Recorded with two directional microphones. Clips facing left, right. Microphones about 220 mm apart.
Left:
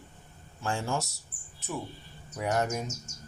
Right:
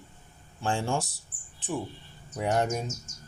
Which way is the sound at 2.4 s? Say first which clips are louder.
Right 2 dB; 30° right (ahead or behind).